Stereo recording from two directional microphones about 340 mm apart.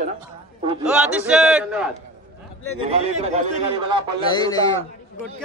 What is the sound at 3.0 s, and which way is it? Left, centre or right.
A man's voice, centre.